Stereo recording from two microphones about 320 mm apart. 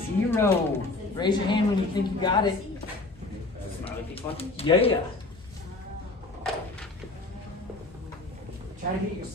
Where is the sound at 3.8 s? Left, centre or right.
Centre.